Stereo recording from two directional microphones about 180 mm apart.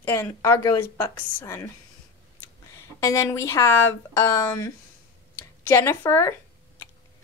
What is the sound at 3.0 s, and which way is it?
Speech, 15° left (ahead or behind).